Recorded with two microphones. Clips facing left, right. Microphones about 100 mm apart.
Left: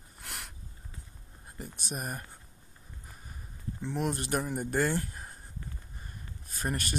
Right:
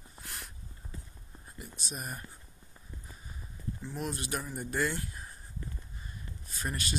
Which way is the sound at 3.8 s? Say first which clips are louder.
Left 6 dB; 65° left (ahead or behind).